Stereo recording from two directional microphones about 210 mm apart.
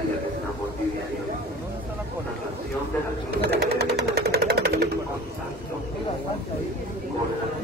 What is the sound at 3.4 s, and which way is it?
Sewing machine, 50° right (ahead or behind).